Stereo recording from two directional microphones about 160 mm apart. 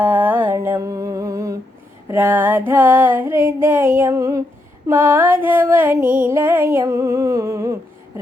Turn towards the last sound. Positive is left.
turn(degrees=-20)  # may be behind; listen again after turning